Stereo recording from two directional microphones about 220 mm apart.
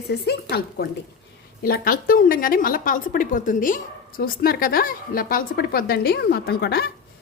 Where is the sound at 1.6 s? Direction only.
40° left (ahead or behind).